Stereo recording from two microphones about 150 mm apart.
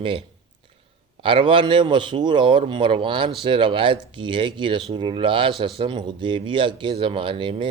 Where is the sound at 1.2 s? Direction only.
35° right (ahead or behind).